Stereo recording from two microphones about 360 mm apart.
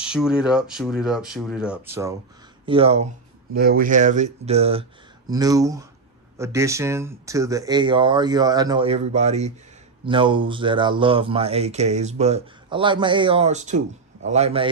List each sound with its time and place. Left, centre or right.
0.0 s speech: centre